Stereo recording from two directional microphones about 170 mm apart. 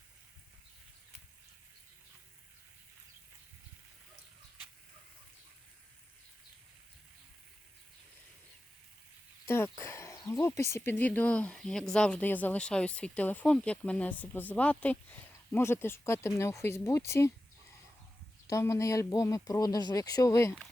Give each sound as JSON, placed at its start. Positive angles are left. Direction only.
{"t": 9.5, "sound": "a sound", "side_deg": 15}
{"t": 10.5, "sound": "speech", "side_deg": 15}
{"t": 18.4, "sound": "speech", "side_deg": 20}